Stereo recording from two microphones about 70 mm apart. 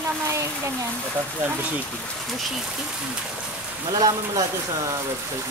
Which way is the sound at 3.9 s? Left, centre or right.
Right.